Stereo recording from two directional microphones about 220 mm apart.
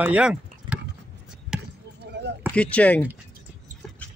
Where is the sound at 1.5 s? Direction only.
5° right (ahead or behind).